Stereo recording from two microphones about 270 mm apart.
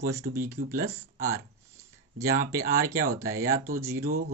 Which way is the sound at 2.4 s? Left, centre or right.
Centre.